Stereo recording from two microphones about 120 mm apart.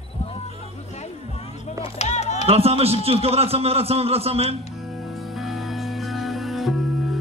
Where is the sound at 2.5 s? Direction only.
55° right (ahead or behind).